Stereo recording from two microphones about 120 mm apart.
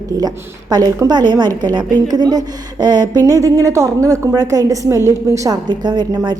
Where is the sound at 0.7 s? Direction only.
35° right (ahead or behind).